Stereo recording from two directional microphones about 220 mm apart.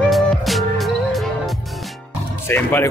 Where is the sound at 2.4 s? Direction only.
10° left (ahead or behind).